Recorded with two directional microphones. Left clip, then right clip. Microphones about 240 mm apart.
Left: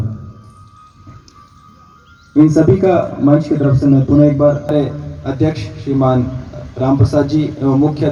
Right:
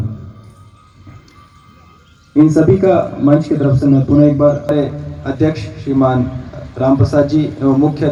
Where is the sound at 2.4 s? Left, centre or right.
Centre.